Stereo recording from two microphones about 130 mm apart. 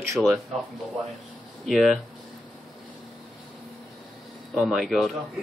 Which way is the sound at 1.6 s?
Centre (ahead or behind).